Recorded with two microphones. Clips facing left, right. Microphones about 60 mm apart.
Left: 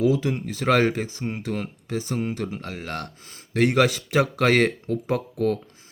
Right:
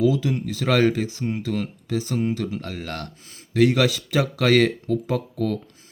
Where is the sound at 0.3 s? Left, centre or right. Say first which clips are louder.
Even; left.